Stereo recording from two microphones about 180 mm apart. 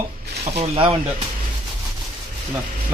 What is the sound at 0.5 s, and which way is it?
Speech, 35° right (ahead or behind).